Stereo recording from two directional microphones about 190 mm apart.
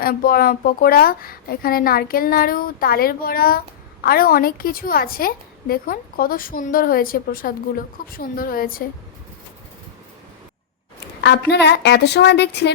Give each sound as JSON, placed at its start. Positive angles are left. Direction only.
{"t": 0.0, "sound": "a woman's voice", "side_deg": 50}
{"t": 11.2, "sound": "a woman's voice", "side_deg": 65}